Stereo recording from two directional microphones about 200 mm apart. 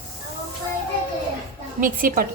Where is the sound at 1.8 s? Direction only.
45° right (ahead or behind).